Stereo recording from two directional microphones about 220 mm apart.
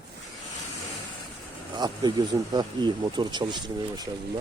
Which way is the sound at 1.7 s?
20° right (ahead or behind).